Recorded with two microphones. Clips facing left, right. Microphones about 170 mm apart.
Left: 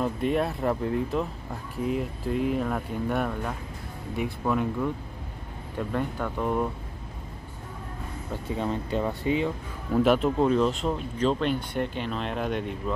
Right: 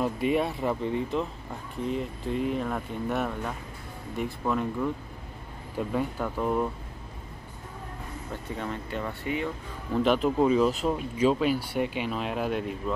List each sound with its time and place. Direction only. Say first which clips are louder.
0.0 s speech: even; 5° right (ahead or behind)
8.5 s speech: left 6 dB; 20° left (ahead or behind)
9.9 s speech: left 2 dB; centre (ahead or behind)